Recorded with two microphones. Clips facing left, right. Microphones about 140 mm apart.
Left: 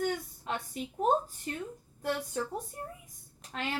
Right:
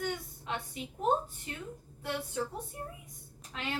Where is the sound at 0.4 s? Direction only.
45° left (ahead or behind).